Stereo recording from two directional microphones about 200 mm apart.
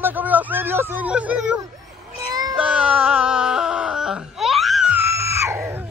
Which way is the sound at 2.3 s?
20° right (ahead or behind).